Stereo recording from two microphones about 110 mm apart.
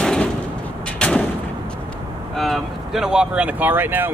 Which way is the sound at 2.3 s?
Centre (ahead or behind).